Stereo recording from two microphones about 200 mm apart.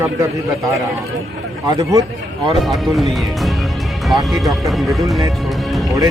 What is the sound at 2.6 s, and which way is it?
Speech, centre (ahead or behind).